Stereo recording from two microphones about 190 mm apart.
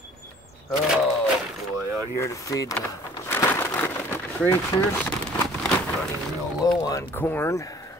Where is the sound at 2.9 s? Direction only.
10° left (ahead or behind).